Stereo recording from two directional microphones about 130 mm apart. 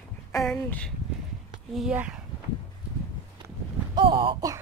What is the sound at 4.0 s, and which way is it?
Speech, 40° right (ahead or behind).